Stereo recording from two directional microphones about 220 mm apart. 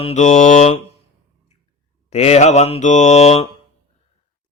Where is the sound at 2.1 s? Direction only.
30° left (ahead or behind).